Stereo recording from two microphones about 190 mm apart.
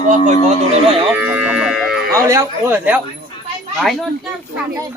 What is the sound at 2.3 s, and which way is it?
Speech, 15° right (ahead or behind).